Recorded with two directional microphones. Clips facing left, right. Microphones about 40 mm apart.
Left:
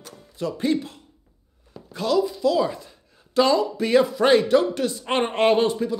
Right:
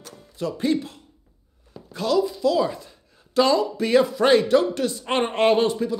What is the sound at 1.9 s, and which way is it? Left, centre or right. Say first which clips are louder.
A man's voice: even; left.